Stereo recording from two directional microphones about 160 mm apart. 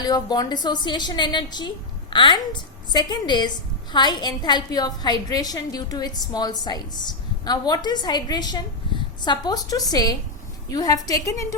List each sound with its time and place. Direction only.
0.0 s a woman's voice: 25° left (ahead or behind)